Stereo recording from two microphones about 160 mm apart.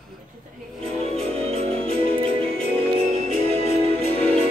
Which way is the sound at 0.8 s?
40° right (ahead or behind).